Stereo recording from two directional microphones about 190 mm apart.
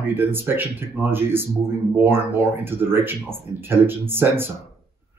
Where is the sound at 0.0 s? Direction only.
10° right (ahead or behind).